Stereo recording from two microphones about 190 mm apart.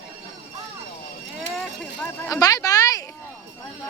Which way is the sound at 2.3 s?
20° left (ahead or behind).